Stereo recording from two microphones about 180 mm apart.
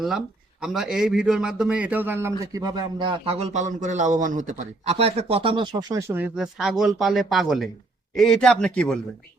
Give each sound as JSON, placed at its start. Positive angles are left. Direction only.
{"t": 0.6, "sound": "a man's voice", "side_deg": -5}